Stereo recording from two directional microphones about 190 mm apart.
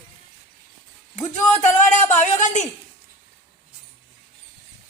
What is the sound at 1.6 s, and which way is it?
Speech, 40° left (ahead or behind).